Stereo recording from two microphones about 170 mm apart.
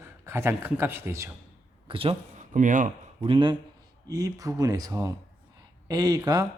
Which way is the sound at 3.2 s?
30° right (ahead or behind).